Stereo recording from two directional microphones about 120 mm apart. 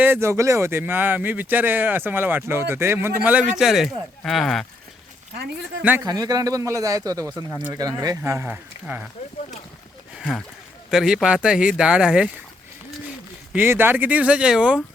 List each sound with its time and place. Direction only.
0.0 s speech: 20° right (ahead or behind)
3.5 s a man's voice: 5° right (ahead or behind)
6.0 s speech: 30° right (ahead or behind); by 9.0 s 15° right (ahead or behind)
10.9 s speech: 5° right (ahead or behind)
13.5 s speech: 20° right (ahead or behind)